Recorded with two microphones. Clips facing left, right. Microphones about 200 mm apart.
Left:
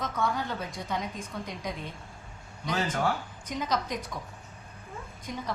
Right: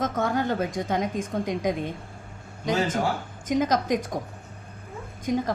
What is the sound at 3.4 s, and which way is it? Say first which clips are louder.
Speech: right 9 dB; 45° right (ahead or behind).